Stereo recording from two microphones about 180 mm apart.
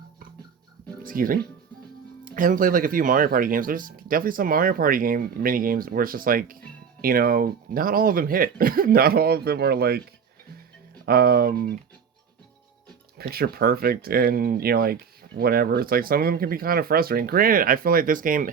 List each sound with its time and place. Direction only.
1.0 s speech: 50° right (ahead or behind)
11.0 s speech: 60° right (ahead or behind)
13.1 s speech: 60° right (ahead or behind)